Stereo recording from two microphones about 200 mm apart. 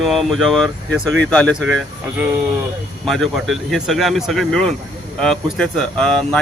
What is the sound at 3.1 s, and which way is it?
Speech, centre (ahead or behind).